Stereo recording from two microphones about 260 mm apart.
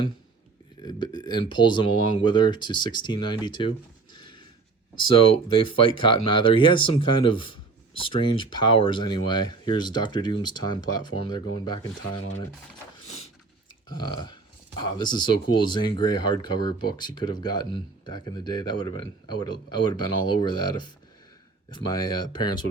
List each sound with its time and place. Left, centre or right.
0.8 s speech: centre
4.1 s a sound: centre
5.5 s speech: centre
13.9 s speech: centre